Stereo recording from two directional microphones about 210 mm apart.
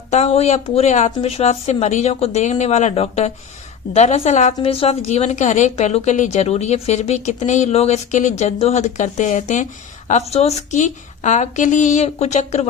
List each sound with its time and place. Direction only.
0.1 s a woman's voice: 30° left (ahead or behind)